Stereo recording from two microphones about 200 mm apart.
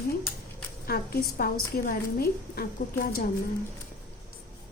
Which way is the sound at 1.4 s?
45° left (ahead or behind).